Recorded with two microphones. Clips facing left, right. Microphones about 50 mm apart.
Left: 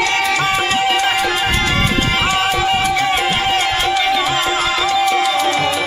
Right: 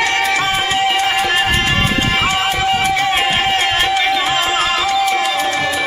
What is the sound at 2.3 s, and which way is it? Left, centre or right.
Music, right.